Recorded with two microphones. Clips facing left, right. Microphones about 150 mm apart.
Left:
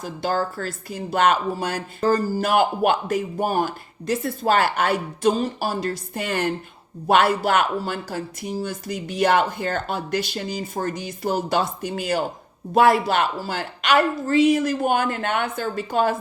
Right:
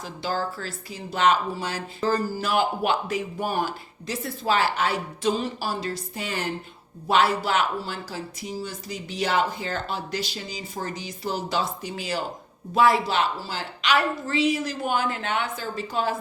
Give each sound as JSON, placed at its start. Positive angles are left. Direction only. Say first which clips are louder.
{"t": 0.0, "sound": "speech", "louder": "left 4 dB", "side_deg": 50}